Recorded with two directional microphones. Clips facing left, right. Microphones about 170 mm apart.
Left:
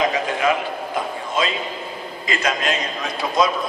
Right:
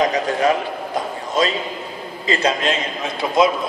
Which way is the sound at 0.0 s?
40° right (ahead or behind).